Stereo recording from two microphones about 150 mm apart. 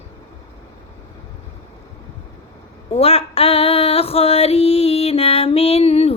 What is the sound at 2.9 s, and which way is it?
Female singing, 40° left (ahead or behind).